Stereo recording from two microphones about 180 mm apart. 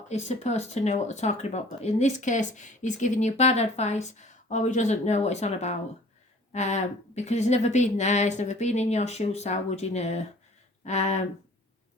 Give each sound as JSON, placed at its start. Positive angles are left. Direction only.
{"t": 0.1, "sound": "speech", "side_deg": 40}